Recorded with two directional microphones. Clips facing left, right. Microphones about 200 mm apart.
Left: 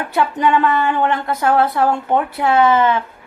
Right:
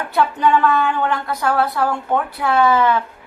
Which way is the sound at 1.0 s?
20° left (ahead or behind).